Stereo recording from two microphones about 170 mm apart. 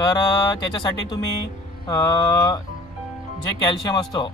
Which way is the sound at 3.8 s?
25° left (ahead or behind).